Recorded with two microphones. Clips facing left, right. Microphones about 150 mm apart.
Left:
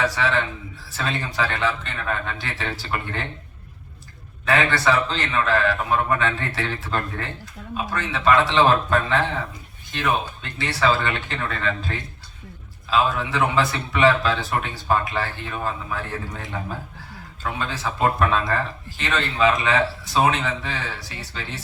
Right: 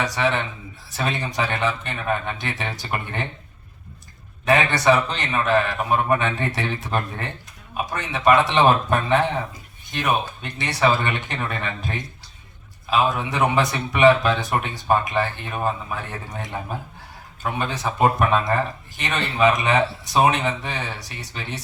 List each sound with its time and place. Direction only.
0.0 s a man's voice: 20° right (ahead or behind)
4.4 s a man's voice: 20° right (ahead or behind)